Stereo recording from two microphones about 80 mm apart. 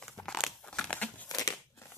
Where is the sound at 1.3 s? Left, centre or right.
Left.